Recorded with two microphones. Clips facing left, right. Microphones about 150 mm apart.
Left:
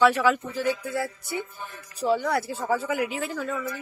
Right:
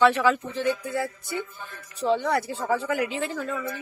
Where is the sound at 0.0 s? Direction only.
5° left (ahead or behind).